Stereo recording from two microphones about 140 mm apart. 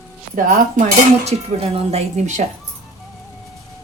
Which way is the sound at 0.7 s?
55° right (ahead or behind).